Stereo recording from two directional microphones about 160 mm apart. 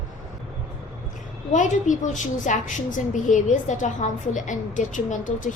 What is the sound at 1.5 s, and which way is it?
A woman's voice, 50° left (ahead or behind).